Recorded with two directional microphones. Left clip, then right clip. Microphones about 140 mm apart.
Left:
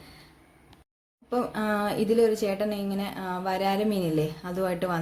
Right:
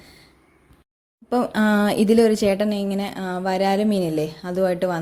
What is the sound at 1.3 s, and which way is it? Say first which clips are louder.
Speech: right 7 dB; 65° right (ahead or behind).